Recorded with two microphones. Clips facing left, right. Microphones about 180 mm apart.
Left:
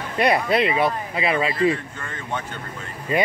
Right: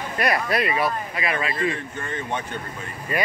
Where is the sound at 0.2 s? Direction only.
25° left (ahead or behind).